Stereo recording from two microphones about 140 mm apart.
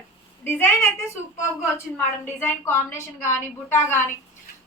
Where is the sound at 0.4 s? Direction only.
15° left (ahead or behind).